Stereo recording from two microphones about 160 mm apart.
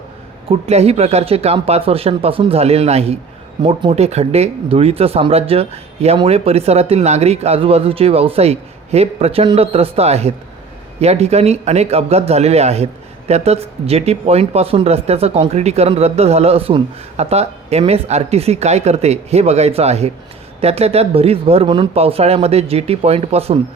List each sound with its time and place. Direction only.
0.4 s a man's voice: 40° right (ahead or behind)